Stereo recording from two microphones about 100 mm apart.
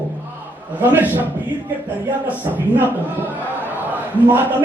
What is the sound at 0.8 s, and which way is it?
Speech, 20° right (ahead or behind).